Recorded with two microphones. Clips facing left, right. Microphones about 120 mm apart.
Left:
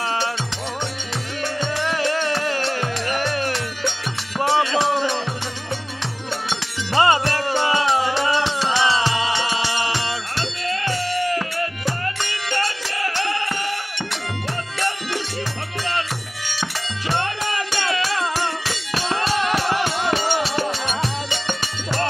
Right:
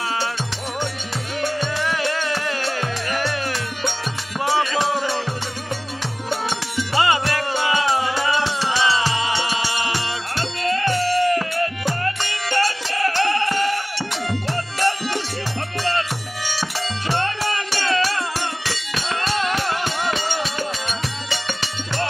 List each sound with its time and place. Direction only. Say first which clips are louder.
1.6 s music: left 1 dB; 25° left (ahead or behind)
4.6 s music: left 1 dB; 20° left (ahead or behind)
7.0 s music: left 3 dB; 30° left (ahead or behind)
11.1 s music: right 4 dB; 20° left (ahead or behind)
12.5 s music: right 4 dB; 20° left (ahead or behind)
17.7 s music: right 3 dB; 15° left (ahead or behind)